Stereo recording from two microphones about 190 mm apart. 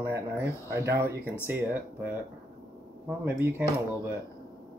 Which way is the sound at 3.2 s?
10° right (ahead or behind).